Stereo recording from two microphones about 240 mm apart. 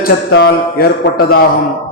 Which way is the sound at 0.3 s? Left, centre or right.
Left.